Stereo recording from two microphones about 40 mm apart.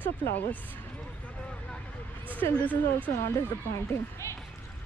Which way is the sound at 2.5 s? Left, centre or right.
Left.